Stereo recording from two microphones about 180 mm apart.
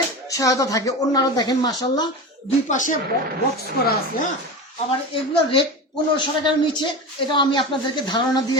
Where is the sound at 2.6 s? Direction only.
45° left (ahead or behind).